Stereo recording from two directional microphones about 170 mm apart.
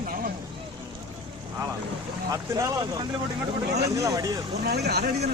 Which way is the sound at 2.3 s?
20° right (ahead or behind).